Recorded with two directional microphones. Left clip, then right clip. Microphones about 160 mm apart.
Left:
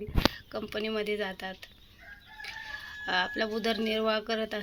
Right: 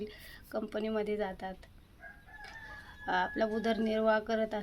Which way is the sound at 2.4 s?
Centre (ahead or behind).